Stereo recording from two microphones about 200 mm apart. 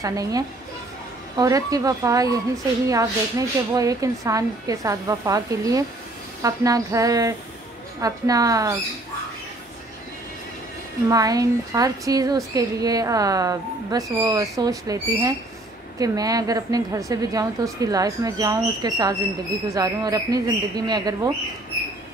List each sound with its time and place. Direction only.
0.0 s a woman's voice: 15° right (ahead or behind)
11.1 s a woman's voice: 20° right (ahead or behind)